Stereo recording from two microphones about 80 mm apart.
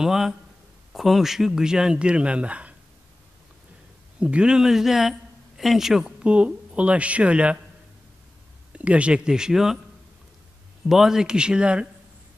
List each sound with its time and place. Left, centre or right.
0.0 s a man's voice: centre
4.2 s speech: centre
8.7 s speech: centre
10.9 s speech: centre